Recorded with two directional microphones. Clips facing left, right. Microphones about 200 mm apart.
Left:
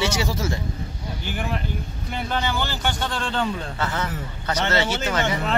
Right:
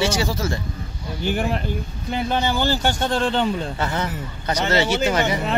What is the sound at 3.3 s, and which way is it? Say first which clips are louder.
A man's voice: right 4 dB; 20° right (ahead or behind).